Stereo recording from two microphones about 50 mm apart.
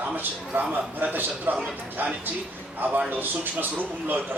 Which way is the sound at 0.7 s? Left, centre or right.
Right.